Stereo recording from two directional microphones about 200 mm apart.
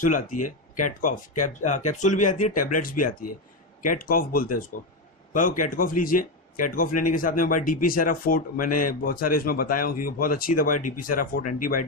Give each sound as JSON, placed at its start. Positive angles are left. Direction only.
{"t": 0.0, "sound": "a man's voice", "side_deg": 40}